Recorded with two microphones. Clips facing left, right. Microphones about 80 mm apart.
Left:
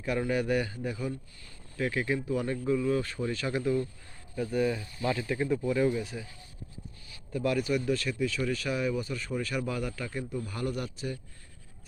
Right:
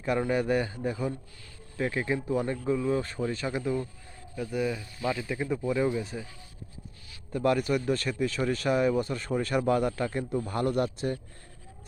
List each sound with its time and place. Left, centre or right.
0.3 s a man's voice: right
4.4 s speech: centre
5.5 s speech: centre
7.3 s speech: right